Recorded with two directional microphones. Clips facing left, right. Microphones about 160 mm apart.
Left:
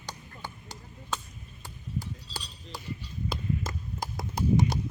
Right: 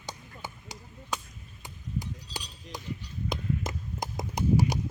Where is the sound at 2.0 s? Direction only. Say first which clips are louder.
Right 1 dB; 15° right (ahead or behind).